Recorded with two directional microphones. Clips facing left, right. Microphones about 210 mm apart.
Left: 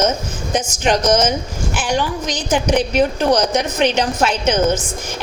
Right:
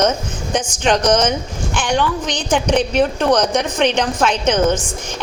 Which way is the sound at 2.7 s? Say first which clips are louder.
Even; 10° left (ahead or behind).